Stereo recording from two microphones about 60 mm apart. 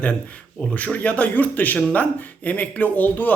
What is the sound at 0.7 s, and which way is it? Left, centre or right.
Speech, left.